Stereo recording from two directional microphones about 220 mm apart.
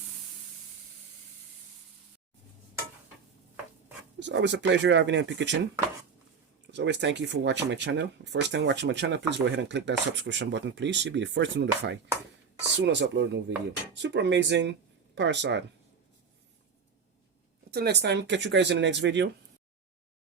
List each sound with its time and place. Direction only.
4.2 s speech: 55° right (ahead or behind)
6.7 s speech: 55° right (ahead or behind)
17.7 s speech: 45° right (ahead or behind)